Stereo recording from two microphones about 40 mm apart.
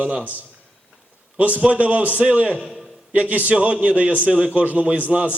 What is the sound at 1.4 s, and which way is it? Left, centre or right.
A man's voice, right.